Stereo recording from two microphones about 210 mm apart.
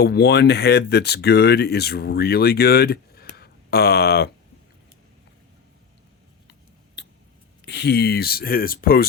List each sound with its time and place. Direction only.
0.0 s speech: 50° left (ahead or behind)
6.5 s scissors: 55° left (ahead or behind)
7.6 s speech: 50° left (ahead or behind)